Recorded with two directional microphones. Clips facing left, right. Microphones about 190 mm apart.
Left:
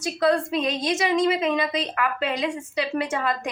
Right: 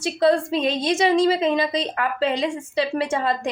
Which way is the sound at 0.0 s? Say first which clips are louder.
Right 3 dB; 30° right (ahead or behind).